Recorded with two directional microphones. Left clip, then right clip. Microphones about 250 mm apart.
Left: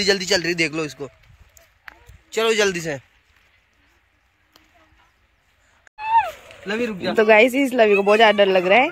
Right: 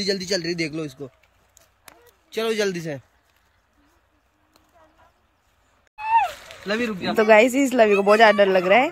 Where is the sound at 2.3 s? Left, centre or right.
Centre.